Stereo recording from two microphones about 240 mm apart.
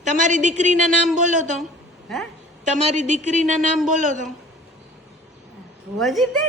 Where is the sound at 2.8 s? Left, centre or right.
Right.